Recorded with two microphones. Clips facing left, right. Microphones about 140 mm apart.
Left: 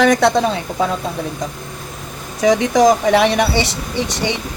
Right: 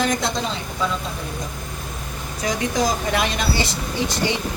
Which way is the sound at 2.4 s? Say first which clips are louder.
Left 10 dB; 80° left.